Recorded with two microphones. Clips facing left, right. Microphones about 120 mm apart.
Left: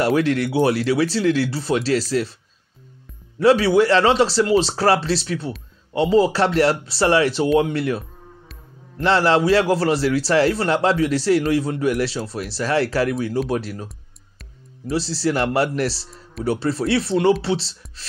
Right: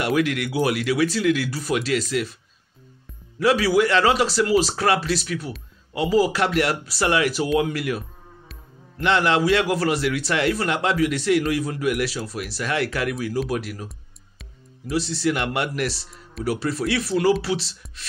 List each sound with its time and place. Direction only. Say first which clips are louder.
0.0 s a man's voice: left 4 dB; 30° left (ahead or behind)
3.3 s speech: left 4 dB; 30° left (ahead or behind)
9.0 s a man's voice: left 3 dB; 35° left (ahead or behind)
14.9 s a man's voice: left 1 dB; 30° left (ahead or behind)